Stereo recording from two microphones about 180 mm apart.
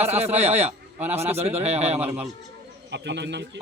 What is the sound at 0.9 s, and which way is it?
Speech, 10° right (ahead or behind).